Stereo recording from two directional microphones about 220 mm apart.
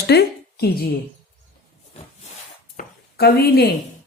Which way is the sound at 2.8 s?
45° left (ahead or behind).